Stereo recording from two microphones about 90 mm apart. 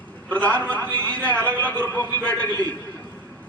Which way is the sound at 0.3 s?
15° left (ahead or behind).